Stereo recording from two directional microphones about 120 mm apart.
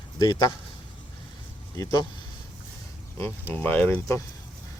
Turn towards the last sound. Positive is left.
turn(degrees=25)  # may be behind; listen again after turning